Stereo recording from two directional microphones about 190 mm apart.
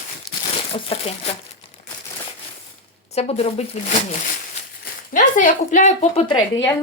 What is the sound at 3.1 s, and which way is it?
Speech, 35° left (ahead or behind).